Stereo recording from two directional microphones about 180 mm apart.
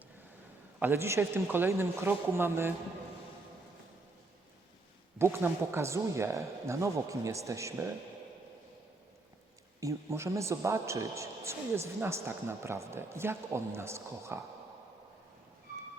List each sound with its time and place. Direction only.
0.8 s speech: 15° right (ahead or behind)
5.1 s speech: 15° right (ahead or behind)
9.8 s speech: 15° right (ahead or behind)